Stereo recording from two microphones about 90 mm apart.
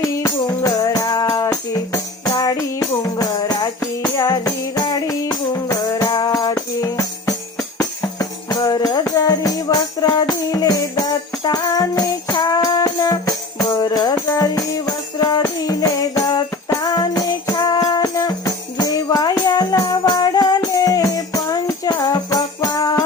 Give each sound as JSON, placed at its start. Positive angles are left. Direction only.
{"t": 0.3, "sound": "music", "side_deg": 40}
{"t": 3.4, "sound": "music", "side_deg": 45}
{"t": 5.5, "sound": "music", "side_deg": 35}
{"t": 14.2, "sound": "music", "side_deg": 35}